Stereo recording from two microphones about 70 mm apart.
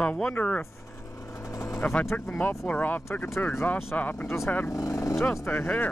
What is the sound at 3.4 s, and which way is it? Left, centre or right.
Speech, left.